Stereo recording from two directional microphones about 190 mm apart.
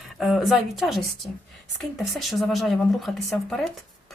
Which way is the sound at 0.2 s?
Centre (ahead or behind).